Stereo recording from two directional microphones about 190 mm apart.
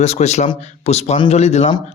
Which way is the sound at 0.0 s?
35° left (ahead or behind).